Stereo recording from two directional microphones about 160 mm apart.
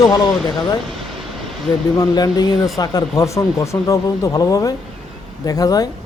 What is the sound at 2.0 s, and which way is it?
Speech, 25° left (ahead or behind).